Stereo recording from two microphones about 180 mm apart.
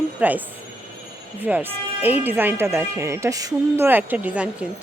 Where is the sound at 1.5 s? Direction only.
5° right (ahead or behind).